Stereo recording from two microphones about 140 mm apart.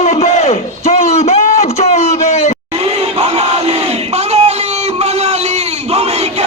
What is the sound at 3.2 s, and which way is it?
Music, 50° right (ahead or behind).